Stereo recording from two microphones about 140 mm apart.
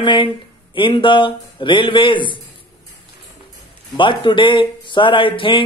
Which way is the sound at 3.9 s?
35° left (ahead or behind).